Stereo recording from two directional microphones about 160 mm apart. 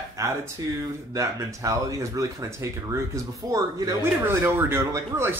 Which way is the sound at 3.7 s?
20° right (ahead or behind).